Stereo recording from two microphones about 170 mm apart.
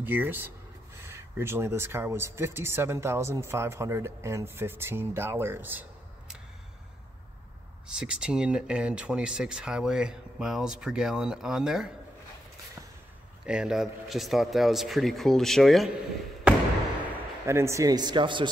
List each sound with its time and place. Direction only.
0.0 s speech: 10° right (ahead or behind)
7.9 s speech: 5° right (ahead or behind)
13.5 s speech: 5° right (ahead or behind)
17.5 s speech: 15° right (ahead or behind)